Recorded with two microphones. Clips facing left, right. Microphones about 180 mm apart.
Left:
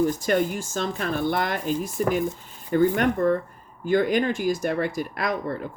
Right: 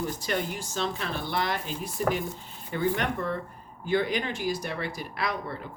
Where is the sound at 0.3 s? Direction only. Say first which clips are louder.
Left 7 dB; 50° left (ahead or behind).